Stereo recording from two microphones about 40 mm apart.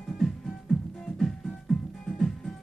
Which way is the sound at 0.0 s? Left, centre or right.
Centre.